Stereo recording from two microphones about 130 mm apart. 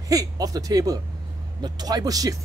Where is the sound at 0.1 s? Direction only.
25° right (ahead or behind).